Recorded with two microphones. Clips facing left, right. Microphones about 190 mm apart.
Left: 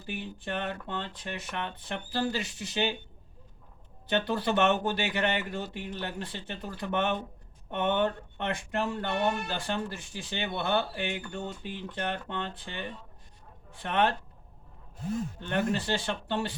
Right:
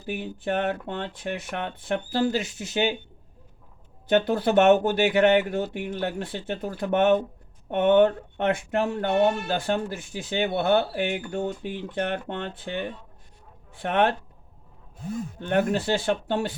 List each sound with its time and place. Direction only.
0.2 s speech: 50° right (ahead or behind)
4.1 s speech: 50° right (ahead or behind)
13.8 s speech: 50° right (ahead or behind)
15.4 s speech: 50° right (ahead or behind)